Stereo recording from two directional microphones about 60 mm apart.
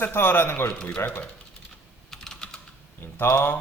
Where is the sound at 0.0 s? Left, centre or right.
Left.